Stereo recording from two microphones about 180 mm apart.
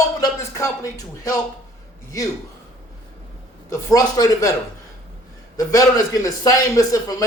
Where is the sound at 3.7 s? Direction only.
20° left (ahead or behind).